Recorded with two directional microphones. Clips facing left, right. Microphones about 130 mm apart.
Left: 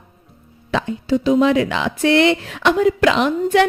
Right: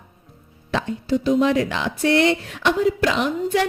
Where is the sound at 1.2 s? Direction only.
90° left.